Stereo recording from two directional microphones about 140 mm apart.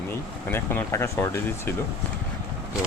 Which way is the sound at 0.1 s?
15° left (ahead or behind).